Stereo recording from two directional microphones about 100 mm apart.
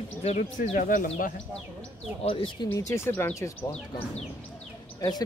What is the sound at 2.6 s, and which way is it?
Speech, 30° left (ahead or behind).